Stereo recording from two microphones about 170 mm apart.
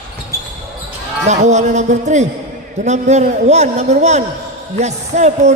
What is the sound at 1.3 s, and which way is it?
A man's voice, 45° right (ahead or behind).